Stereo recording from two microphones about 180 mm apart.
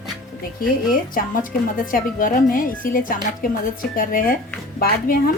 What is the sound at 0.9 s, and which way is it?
Speech, 50° left (ahead or behind).